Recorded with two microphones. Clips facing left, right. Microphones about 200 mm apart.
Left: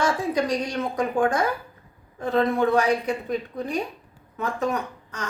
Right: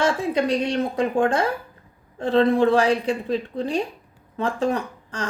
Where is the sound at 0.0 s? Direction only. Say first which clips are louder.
Right 2 dB; 25° right (ahead or behind).